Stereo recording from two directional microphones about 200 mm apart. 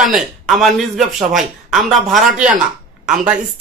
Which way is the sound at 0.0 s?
Centre (ahead or behind).